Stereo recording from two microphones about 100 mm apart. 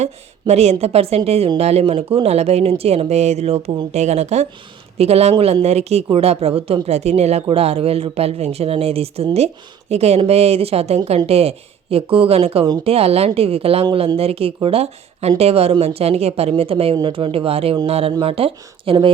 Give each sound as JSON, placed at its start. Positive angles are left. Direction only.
{"t": 0.0, "sound": "speech", "side_deg": -90}
{"t": 17.0, "sound": "speech", "side_deg": -60}